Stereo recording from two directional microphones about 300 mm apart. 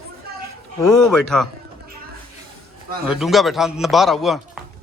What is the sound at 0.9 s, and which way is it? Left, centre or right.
Speech, centre.